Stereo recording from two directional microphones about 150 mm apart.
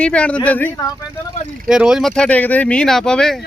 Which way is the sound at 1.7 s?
5° right (ahead or behind).